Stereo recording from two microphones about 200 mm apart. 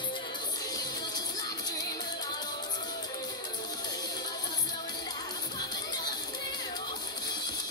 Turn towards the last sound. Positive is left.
turn(degrees=20)  # may be behind; listen again after turning